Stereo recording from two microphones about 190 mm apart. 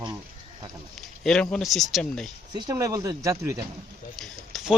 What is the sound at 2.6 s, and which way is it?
Speech, 20° right (ahead or behind).